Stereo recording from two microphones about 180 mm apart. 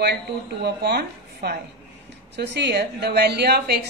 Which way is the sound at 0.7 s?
65° right (ahead or behind).